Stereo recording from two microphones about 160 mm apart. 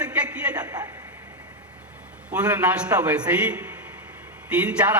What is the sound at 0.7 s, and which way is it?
Speech, 20° right (ahead or behind).